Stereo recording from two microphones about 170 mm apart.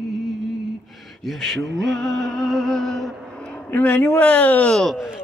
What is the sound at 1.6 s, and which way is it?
Music, 90° right.